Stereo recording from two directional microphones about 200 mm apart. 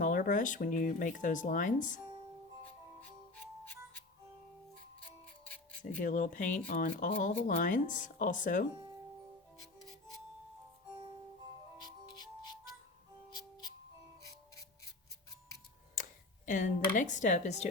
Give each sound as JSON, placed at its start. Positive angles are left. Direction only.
{"t": 0.0, "sound": "speech", "side_deg": 40}
{"t": 5.5, "sound": "a sound", "side_deg": 10}
{"t": 6.0, "sound": "speech", "side_deg": 40}
{"t": 14.2, "sound": "music", "side_deg": 15}
{"t": 16.0, "sound": "a sound", "side_deg": 40}
{"t": 16.5, "sound": "speech", "side_deg": 40}